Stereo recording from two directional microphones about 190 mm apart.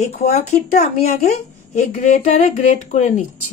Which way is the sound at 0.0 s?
35° left (ahead or behind).